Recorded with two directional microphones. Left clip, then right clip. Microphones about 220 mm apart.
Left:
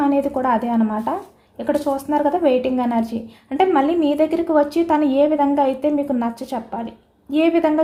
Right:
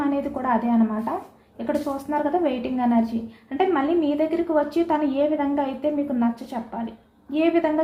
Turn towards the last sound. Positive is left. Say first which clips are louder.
# left 4 dB
turn(degrees=45)  # may be behind; listen again after turning